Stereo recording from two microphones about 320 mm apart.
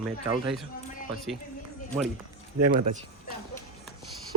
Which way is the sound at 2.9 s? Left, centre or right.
Right.